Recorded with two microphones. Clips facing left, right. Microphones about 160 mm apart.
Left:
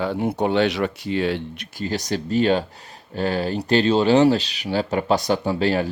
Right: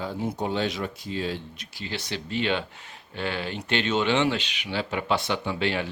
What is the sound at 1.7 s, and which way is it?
Speech, 40° left (ahead or behind).